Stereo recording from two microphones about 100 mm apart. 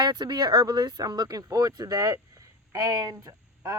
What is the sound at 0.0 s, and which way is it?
Speech, 45° right (ahead or behind).